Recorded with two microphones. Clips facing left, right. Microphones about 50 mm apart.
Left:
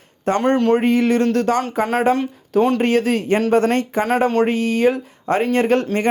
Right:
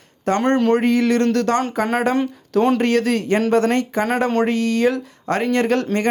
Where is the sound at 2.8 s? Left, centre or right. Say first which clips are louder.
Left 1 dB; left.